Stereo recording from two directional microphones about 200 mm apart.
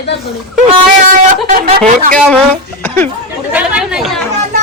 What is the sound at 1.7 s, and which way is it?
Speech, 45° right (ahead or behind).